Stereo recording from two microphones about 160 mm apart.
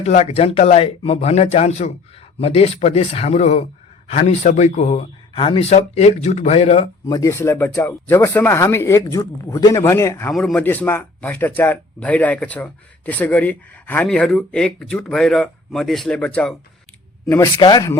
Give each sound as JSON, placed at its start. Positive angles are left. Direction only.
{"t": 0.0, "sound": "speech", "side_deg": 40}
{"t": 7.1, "sound": "speech", "side_deg": 20}
{"t": 10.3, "sound": "speech", "side_deg": 5}
{"t": 17.2, "sound": "speech", "side_deg": 15}